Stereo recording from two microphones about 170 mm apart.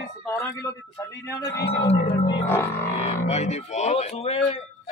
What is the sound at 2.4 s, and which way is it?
Speech, 15° left (ahead or behind).